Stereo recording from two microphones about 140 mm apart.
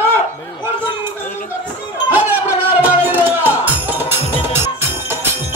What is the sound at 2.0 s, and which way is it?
Music, 15° right (ahead or behind).